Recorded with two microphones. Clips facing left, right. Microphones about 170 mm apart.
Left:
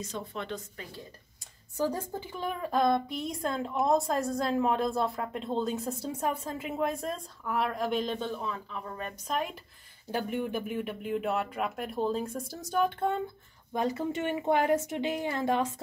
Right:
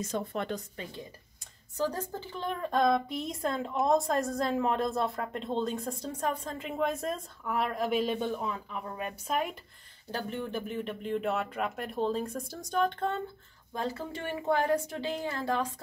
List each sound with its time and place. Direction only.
0.1 s a woman's voice: 50° right (ahead or behind)
1.8 s a woman's voice: 15° left (ahead or behind); by 9.4 s 15° right (ahead or behind)
10.1 s a woman's voice: 10° left (ahead or behind)
13.7 s a woman's voice: 20° left (ahead or behind)